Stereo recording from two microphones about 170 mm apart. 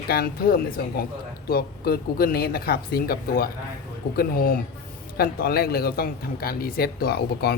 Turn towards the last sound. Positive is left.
turn(degrees=65)  # may be behind; listen again after turning